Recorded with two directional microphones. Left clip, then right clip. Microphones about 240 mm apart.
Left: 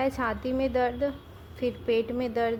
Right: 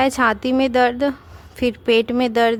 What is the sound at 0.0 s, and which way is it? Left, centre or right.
A woman's voice, right.